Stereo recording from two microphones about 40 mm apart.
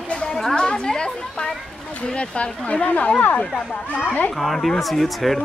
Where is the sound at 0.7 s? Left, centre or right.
Left.